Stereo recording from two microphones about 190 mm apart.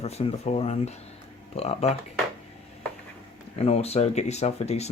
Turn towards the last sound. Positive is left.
turn(degrees=35)  # may be behind; listen again after turning